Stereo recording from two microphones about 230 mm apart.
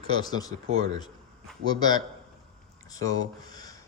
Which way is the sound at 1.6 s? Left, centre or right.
Centre.